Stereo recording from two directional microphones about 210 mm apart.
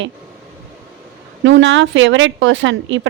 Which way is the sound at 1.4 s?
60° right (ahead or behind).